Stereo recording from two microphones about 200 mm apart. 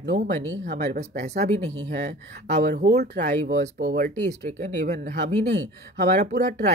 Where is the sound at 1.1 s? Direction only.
55° right (ahead or behind).